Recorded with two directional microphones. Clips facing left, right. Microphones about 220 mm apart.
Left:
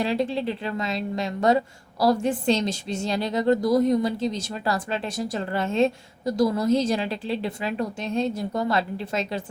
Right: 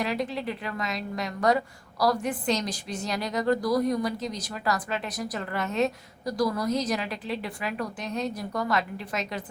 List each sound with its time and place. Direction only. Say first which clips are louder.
0.0 s a woman's voice: left 5 dB; 30° left (ahead or behind)